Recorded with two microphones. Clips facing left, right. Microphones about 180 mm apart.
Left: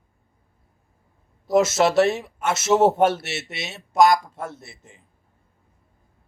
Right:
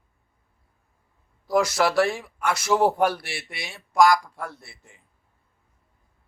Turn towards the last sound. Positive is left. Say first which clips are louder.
# left 5 dB
turn(degrees=20)  # may be behind; listen again after turning